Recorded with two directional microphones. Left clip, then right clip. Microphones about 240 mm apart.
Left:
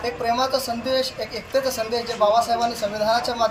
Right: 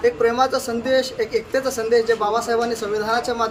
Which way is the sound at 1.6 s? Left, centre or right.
Right.